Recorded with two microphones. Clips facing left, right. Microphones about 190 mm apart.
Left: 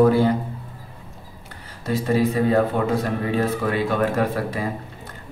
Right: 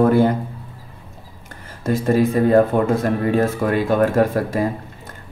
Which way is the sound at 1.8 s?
45° right (ahead or behind).